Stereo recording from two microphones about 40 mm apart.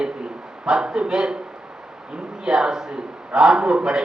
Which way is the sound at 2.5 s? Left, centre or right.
Centre.